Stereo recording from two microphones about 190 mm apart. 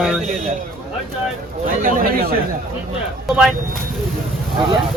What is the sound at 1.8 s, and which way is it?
Speech, 45° right (ahead or behind).